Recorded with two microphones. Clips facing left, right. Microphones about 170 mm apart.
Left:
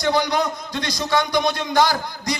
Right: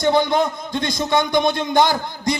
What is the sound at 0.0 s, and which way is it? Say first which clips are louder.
A man's voice: right 3 dB; 25° right (ahead or behind).